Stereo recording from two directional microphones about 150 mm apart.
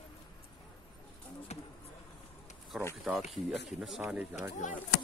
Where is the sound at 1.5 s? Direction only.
45° left (ahead or behind).